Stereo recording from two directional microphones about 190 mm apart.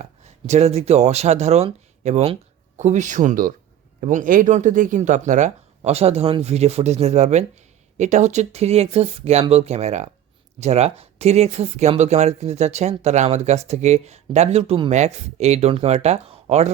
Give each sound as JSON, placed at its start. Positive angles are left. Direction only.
{"t": 0.0, "sound": "speech", "side_deg": -35}